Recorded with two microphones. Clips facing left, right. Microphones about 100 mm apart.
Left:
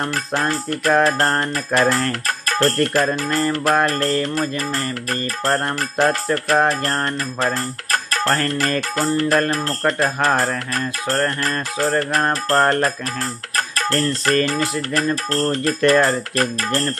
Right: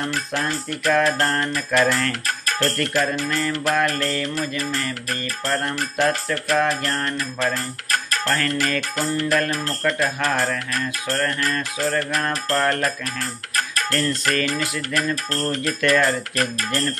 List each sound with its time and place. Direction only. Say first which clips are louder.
0.0 s music: left 3 dB; 45° left (ahead or behind)